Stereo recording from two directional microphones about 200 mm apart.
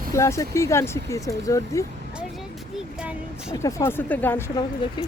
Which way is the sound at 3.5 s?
15° left (ahead or behind).